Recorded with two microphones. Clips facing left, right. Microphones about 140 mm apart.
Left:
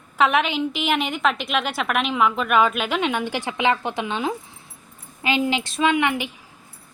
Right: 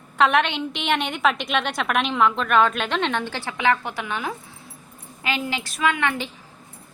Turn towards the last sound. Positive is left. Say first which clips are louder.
# left 3 dB
turn(degrees=15)  # may be behind; listen again after turning